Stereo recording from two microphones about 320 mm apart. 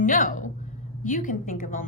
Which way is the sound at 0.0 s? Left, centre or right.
Left.